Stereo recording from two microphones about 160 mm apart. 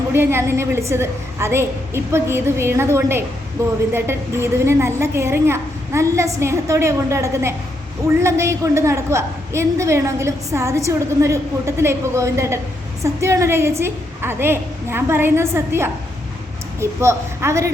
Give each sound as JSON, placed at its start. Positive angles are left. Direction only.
{"t": 0.1, "sound": "a woman's voice", "side_deg": -15}